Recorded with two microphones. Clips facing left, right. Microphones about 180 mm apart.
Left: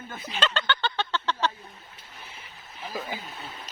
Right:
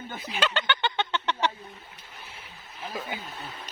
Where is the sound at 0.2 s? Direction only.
5° right (ahead or behind).